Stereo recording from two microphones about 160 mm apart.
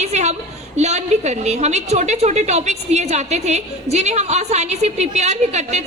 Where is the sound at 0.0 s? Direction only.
45° right (ahead or behind).